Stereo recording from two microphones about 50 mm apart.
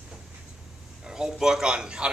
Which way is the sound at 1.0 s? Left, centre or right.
Centre.